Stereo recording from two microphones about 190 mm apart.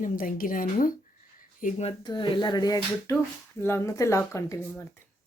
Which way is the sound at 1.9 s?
25° left (ahead or behind).